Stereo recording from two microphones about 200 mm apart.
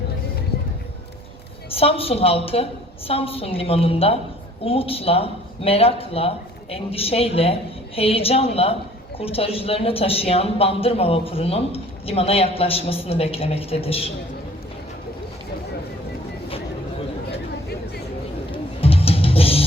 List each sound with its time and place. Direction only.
1.7 s speech: 30° left (ahead or behind)
18.5 s music: 30° left (ahead or behind)